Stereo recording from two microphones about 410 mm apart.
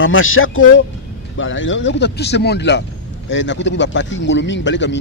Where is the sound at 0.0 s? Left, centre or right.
Left.